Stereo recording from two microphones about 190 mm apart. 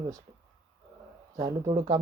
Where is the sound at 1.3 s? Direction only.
15° right (ahead or behind).